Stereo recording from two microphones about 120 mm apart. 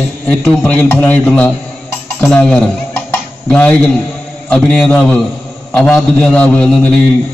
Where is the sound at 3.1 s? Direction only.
10° left (ahead or behind).